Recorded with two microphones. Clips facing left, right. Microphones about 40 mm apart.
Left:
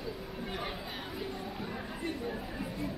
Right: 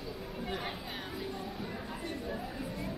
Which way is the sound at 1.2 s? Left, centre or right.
Centre.